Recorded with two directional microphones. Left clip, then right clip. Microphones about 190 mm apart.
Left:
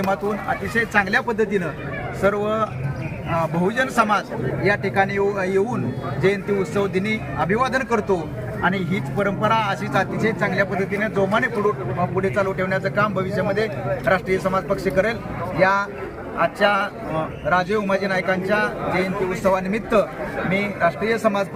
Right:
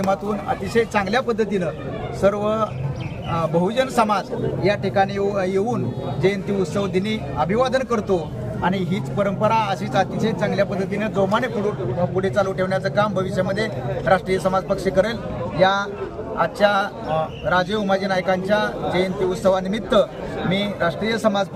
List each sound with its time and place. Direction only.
0.7 s a man's voice: 25° right (ahead or behind)
16.4 s a man's voice: 25° right (ahead or behind)